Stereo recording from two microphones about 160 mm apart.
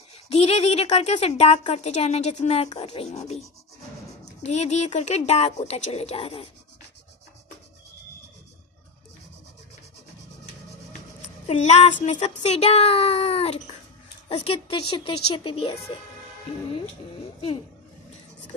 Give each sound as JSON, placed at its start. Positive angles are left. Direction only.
{"t": 0.3, "sound": "a woman's voice", "side_deg": 40}
{"t": 11.4, "sound": "speech", "side_deg": 45}